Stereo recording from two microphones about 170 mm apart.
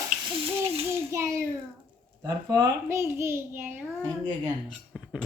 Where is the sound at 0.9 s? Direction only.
15° right (ahead or behind).